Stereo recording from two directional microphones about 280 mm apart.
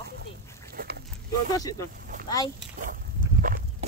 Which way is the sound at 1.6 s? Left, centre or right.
Centre.